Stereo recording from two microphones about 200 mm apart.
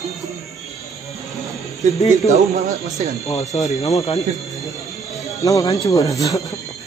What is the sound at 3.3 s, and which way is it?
Speech, 35° left (ahead or behind).